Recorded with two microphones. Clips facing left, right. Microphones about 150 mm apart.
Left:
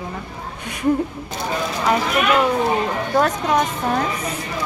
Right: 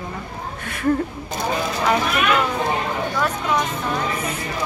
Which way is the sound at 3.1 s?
40° left (ahead or behind).